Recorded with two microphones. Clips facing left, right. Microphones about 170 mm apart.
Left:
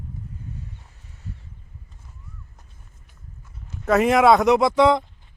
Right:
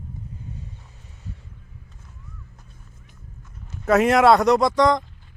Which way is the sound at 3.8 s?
Centre (ahead or behind).